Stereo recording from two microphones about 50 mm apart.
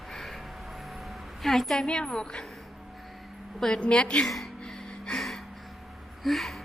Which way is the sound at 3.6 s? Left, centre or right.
Centre.